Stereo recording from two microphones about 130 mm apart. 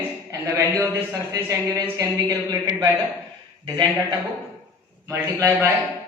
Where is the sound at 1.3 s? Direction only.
25° right (ahead or behind).